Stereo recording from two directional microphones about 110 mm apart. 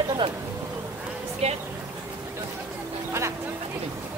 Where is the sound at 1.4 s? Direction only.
70° right (ahead or behind).